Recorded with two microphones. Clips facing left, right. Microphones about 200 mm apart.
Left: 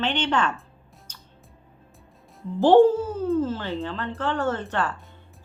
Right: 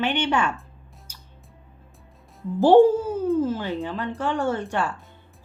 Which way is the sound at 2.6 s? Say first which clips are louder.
Right 1 dB; 10° right (ahead or behind).